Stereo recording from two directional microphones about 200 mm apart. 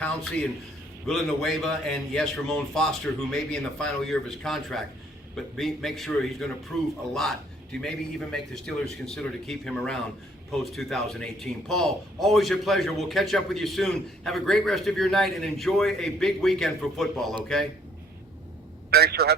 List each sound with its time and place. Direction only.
1.0 s a man's voice: centre (ahead or behind)
18.9 s speech: 50° right (ahead or behind)